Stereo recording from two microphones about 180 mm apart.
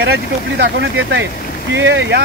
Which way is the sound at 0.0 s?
65° right (ahead or behind).